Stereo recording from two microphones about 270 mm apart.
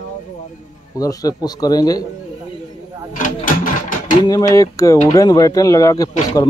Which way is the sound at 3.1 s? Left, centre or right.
Left.